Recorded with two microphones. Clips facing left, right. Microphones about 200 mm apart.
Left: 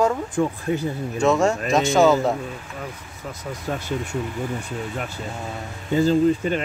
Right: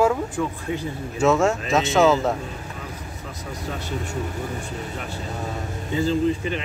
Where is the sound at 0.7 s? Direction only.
45° left (ahead or behind).